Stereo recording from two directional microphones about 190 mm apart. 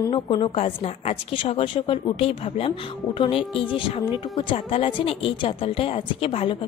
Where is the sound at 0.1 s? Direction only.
30° left (ahead or behind).